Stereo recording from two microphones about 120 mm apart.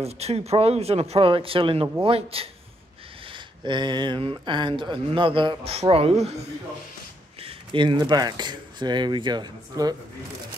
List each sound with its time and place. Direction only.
0.0 s speech: 60° right (ahead or behind)
3.3 s speech: 40° right (ahead or behind)
5.8 s speech: 55° right (ahead or behind)
7.4 s speech: 40° right (ahead or behind)